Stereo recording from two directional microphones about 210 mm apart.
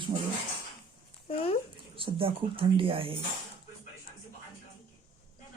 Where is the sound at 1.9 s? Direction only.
25° right (ahead or behind).